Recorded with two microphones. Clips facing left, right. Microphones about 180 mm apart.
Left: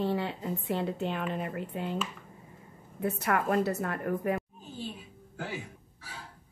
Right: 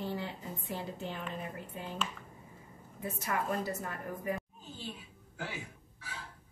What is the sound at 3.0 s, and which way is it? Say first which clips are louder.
Speech: left 6 dB; 65° left (ahead or behind).